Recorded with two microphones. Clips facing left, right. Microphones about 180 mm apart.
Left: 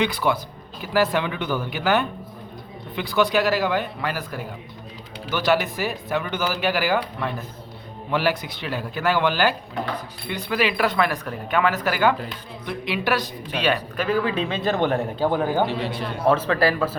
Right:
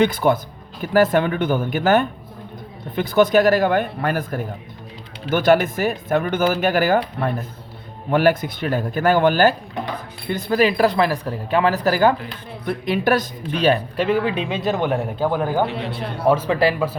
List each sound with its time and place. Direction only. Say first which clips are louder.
0.0 s speech: right 5 dB; 45° right (ahead or behind)
14.0 s speech: even; 25° right (ahead or behind)